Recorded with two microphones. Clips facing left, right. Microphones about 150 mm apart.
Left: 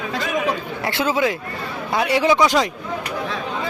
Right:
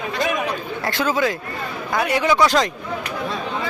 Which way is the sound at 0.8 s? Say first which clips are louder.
Left 1 dB; 25° left (ahead or behind).